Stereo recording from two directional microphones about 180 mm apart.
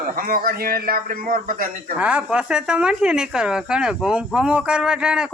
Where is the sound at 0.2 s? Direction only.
50° right (ahead or behind).